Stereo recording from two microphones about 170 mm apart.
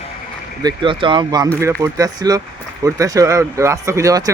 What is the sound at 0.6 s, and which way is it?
Speech, 30° right (ahead or behind).